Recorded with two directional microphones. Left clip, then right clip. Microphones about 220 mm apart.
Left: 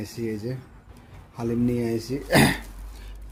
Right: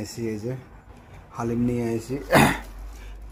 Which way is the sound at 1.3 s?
10° left (ahead or behind).